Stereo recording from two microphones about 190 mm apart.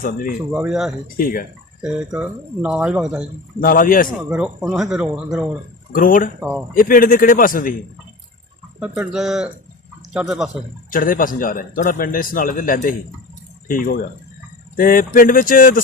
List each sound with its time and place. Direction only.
0.0 s a man's voice: 50° left (ahead or behind)
0.5 s speech: 5° right (ahead or behind)
1.1 s a man's voice: 50° left (ahead or behind)
1.8 s speech: 5° right (ahead or behind)
3.6 s a man's voice: 45° left (ahead or behind)
4.2 s speech: 5° right (ahead or behind)
5.9 s a man's voice: 45° left (ahead or behind)
8.8 s speech: 5° right (ahead or behind)
10.9 s a man's voice: 45° left (ahead or behind)